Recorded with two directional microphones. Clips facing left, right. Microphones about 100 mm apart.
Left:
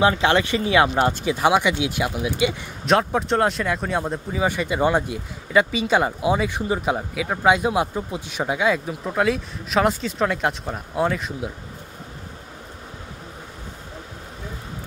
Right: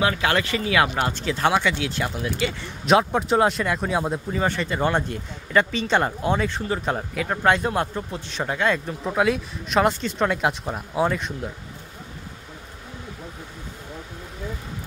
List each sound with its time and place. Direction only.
0.0 s speech: 25° left (ahead or behind)
1.2 s speech: 15° left (ahead or behind)
2.8 s speech: centre (ahead or behind)
4.4 s speech: 10° left (ahead or behind)